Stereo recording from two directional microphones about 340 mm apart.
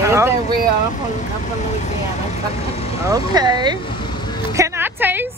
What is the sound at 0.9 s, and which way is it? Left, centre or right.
Speech, left.